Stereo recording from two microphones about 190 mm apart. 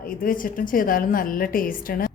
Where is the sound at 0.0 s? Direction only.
50° left (ahead or behind).